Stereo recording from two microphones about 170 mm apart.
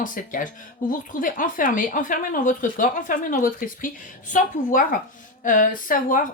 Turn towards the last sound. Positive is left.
turn(degrees=50)  # may be behind; listen again after turning